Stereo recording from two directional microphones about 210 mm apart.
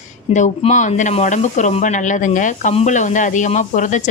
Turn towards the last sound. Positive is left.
turn(degrees=35)  # may be behind; listen again after turning